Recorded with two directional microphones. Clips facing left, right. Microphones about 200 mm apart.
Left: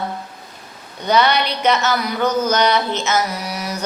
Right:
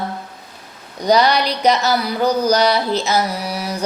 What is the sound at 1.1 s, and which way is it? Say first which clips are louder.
Mantra: right 2 dB; 35° right (ahead or behind).